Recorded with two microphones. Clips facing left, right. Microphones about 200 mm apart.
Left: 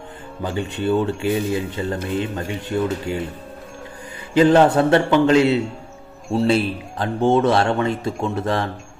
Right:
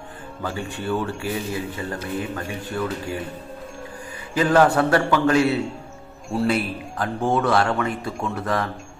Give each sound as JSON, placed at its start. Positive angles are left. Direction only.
{"t": 0.4, "sound": "speech", "side_deg": 20}
{"t": 4.3, "sound": "speech", "side_deg": 25}